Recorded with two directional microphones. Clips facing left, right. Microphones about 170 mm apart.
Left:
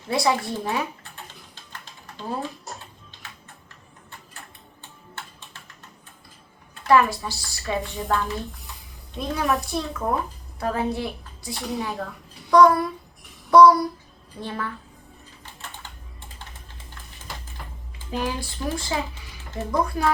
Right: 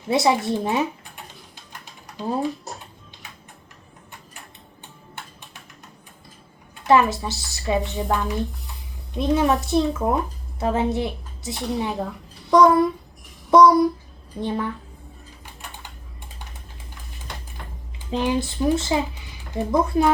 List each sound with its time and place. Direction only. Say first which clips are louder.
0.1 s a woman's voice: right 4 dB; 20° right (ahead or behind)
1.8 s typing: right 6 dB; 15° right (ahead or behind)
6.8 s a woman's voice: right 1 dB; 20° right (ahead or behind)
9.3 s a woman's voice: right 6 dB; 20° right (ahead or behind)
17.3 s a sound: right 1 dB; 5° left (ahead or behind)
18.1 s a woman's voice: right 5 dB; 20° right (ahead or behind)